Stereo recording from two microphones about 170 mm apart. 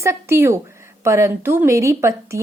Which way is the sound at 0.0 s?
15° right (ahead or behind).